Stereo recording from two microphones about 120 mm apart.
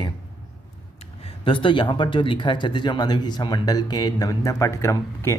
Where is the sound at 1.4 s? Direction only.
45° left (ahead or behind); by 5.3 s 25° left (ahead or behind).